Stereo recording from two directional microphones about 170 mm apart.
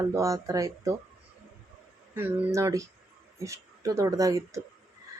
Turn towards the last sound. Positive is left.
turn(degrees=-20)  # may be behind; listen again after turning